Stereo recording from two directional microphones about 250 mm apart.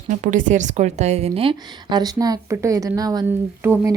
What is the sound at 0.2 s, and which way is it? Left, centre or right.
A woman's voice, right.